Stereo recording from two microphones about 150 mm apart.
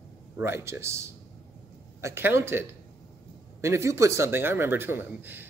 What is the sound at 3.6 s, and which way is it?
A man's voice, 20° right (ahead or behind).